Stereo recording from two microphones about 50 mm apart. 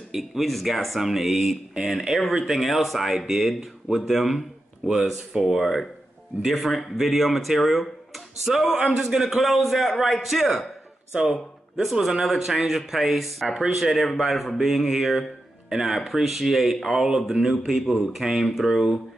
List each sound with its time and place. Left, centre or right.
0.1 s speech: centre
6.4 s speech: centre
11.1 s a man's voice: centre
11.8 s speech: centre